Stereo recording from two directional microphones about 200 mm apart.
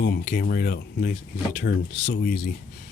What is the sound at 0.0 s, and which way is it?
Speech, 50° left (ahead or behind).